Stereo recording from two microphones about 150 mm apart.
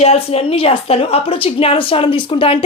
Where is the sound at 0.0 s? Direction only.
45° left (ahead or behind).